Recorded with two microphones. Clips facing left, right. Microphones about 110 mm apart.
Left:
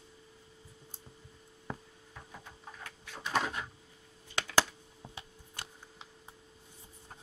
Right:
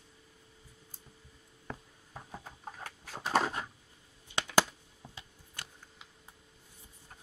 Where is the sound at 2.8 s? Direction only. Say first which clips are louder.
Right 3 dB; 35° right (ahead or behind).